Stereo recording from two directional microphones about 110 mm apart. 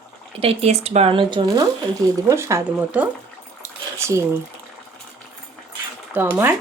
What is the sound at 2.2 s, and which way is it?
Speech, 25° right (ahead or behind).